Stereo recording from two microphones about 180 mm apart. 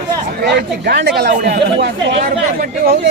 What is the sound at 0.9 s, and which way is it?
Speech, 65° right (ahead or behind).